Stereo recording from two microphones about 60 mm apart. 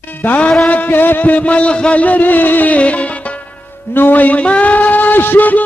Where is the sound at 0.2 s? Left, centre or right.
Left.